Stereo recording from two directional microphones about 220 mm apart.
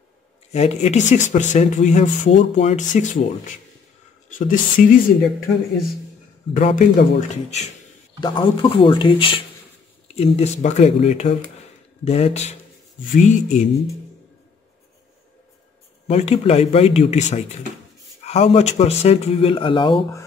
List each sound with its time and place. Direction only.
0.5 s speech: 30° left (ahead or behind)
6.5 s speech: 35° left (ahead or behind)
8.2 s speech: 25° left (ahead or behind)
16.1 s speech: 30° left (ahead or behind)